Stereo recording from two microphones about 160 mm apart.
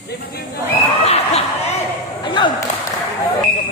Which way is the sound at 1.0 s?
40° left (ahead or behind).